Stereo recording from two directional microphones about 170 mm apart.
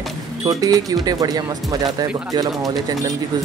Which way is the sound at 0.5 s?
20° right (ahead or behind).